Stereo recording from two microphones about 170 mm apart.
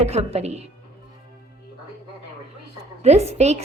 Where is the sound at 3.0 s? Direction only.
40° right (ahead or behind).